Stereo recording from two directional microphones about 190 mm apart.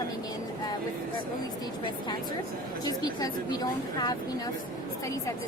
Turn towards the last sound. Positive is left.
turn(degrees=20)  # may be behind; listen again after turning